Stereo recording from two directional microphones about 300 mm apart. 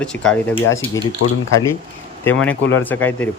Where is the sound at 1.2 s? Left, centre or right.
Left.